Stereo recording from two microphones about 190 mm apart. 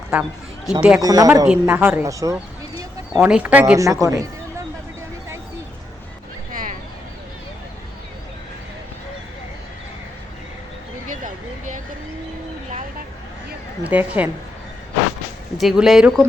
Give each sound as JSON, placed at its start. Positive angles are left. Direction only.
{"t": 0.1, "sound": "a sound", "side_deg": -5}
{"t": 0.8, "sound": "speech", "side_deg": -5}
{"t": 1.0, "sound": "speech", "side_deg": -20}
{"t": 1.5, "sound": "a woman's voice", "side_deg": -10}
{"t": 3.1, "sound": "a woman's voice", "side_deg": -5}
{"t": 4.0, "sound": "a sound", "side_deg": -15}
{"t": 13.8, "sound": "a woman's voice", "side_deg": -10}
{"t": 15.6, "sound": "speech", "side_deg": 0}